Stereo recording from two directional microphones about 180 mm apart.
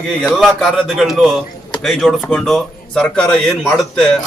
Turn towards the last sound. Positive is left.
turn(degrees=5)  # may be behind; listen again after turning